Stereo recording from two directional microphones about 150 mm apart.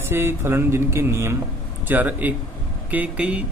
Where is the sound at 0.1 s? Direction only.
15° right (ahead or behind).